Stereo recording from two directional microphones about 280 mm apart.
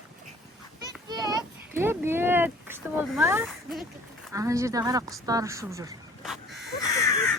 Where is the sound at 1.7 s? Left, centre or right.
Centre.